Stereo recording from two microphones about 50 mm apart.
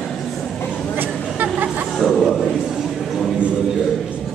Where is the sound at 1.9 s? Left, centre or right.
Centre.